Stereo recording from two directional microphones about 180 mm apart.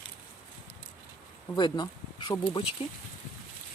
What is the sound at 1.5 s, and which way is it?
Speech, 25° left (ahead or behind).